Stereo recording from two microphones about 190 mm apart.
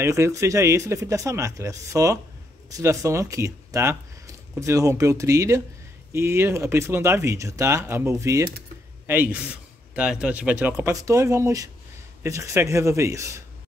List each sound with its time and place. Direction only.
0.0 s a man's voice: 15° right (ahead or behind)